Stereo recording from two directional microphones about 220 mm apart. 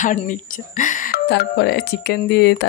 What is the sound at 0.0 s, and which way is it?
Speech, 35° left (ahead or behind).